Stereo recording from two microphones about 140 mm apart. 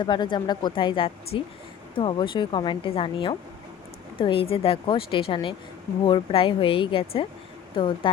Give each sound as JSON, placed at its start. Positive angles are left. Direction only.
{"t": 0.0, "sound": "speech", "side_deg": 35}